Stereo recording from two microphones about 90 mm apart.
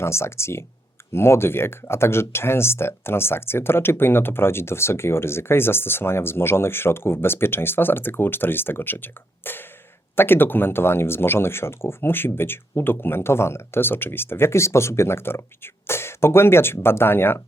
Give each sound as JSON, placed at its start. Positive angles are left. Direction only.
{"t": 0.0, "sound": "speech", "side_deg": 30}